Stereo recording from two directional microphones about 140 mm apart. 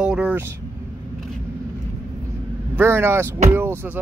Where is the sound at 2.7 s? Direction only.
15° right (ahead or behind).